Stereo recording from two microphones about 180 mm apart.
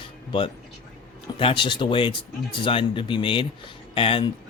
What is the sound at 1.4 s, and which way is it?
Speech, 30° left (ahead or behind).